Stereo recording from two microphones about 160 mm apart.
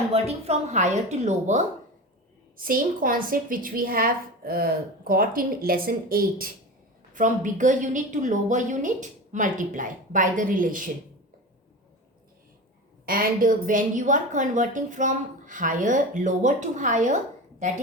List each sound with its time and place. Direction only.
0.1 s a woman's voice: 40° right (ahead or behind)
2.6 s a woman's voice: 65° right (ahead or behind)
7.1 s a woman's voice: 55° right (ahead or behind)
13.1 s a woman's voice: 60° right (ahead or behind)